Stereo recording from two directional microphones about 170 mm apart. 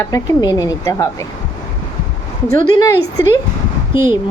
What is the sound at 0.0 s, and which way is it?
A woman's voice, 20° left (ahead or behind).